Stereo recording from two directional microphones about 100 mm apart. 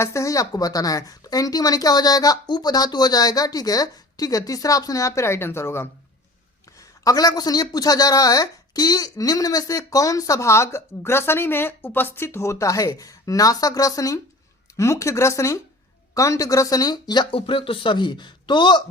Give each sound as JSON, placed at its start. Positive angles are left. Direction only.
{"t": 0.0, "sound": "a woman's voice", "side_deg": 30}
{"t": 7.0, "sound": "a woman's voice", "side_deg": 40}
{"t": 17.3, "sound": "speech", "side_deg": 65}